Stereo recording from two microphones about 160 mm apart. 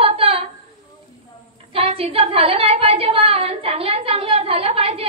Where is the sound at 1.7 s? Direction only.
35° right (ahead or behind).